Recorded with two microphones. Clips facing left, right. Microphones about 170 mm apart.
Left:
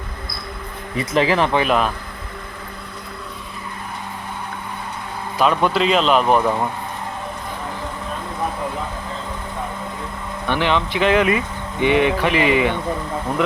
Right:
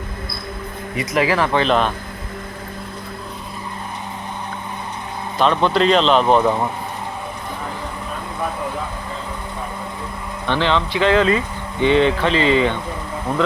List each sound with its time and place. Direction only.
0.9 s speech: 25° left (ahead or behind)
1.6 s a man's voice: 5° left (ahead or behind)
5.4 s a man's voice: 10° left (ahead or behind)
10.4 s speech: 15° left (ahead or behind)